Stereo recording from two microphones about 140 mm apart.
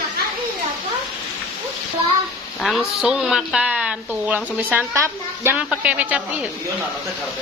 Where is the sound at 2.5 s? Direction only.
Centre (ahead or behind).